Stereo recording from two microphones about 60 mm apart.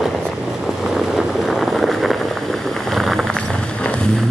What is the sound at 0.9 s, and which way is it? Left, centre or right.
Vehicle, centre.